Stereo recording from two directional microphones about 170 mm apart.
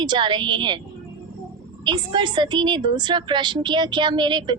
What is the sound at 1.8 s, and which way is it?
A woman's voice, 25° right (ahead or behind).